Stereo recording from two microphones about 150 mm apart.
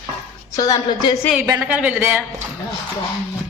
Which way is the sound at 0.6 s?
25° left (ahead or behind).